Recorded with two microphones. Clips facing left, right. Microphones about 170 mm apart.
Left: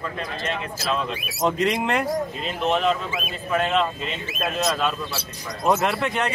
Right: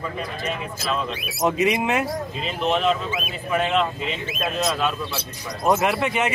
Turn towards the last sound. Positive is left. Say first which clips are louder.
# right 2 dB
turn(degrees=-5)  # may be behind; listen again after turning